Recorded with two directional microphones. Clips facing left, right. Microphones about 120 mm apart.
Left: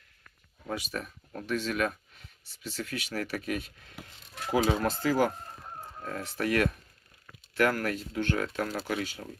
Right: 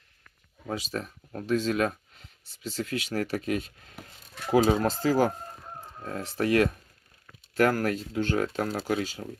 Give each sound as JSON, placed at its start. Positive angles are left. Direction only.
{"t": 0.7, "sound": "speech", "side_deg": -30}
{"t": 3.1, "sound": "speech", "side_deg": -35}